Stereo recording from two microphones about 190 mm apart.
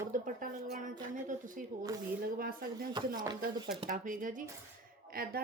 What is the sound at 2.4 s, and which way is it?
Speech, 50° right (ahead or behind).